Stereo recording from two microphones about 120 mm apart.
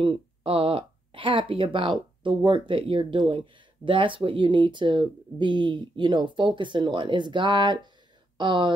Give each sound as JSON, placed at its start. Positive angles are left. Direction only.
{"t": 0.0, "sound": "speech", "side_deg": -45}